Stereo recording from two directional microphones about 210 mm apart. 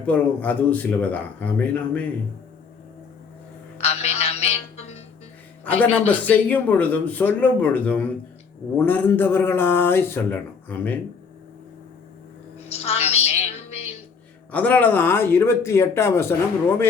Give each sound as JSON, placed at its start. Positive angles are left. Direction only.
{"t": 0.0, "sound": "speech", "side_deg": 5}
{"t": 3.8, "sound": "music", "side_deg": 30}
{"t": 5.6, "sound": "speech", "side_deg": 5}
{"t": 12.5, "sound": "a sound", "side_deg": 30}
{"t": 14.5, "sound": "speech", "side_deg": 5}